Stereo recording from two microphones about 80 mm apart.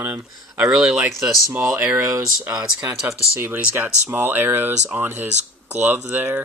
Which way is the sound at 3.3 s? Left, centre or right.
Right.